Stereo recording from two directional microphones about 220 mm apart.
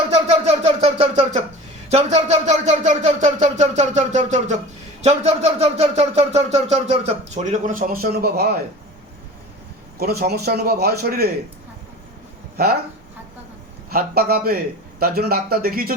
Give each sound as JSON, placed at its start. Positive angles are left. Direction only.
{"t": 0.1, "sound": "a sound", "side_deg": -30}
{"t": 5.0, "sound": "speech", "side_deg": -30}
{"t": 10.0, "sound": "a man's voice", "side_deg": -45}
{"t": 13.9, "sound": "a man's voice", "side_deg": -45}